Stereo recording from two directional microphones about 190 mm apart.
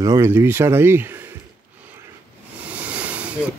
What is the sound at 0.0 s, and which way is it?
Speech, 15° right (ahead or behind).